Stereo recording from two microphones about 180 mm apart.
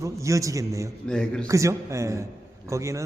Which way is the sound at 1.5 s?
15° right (ahead or behind).